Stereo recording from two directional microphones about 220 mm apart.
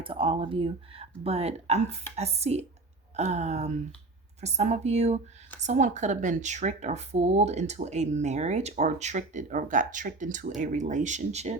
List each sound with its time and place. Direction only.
0.0 s speech: 25° right (ahead or behind)